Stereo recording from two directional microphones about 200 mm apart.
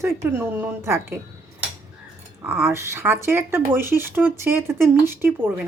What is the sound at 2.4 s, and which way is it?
Speech, 10° right (ahead or behind).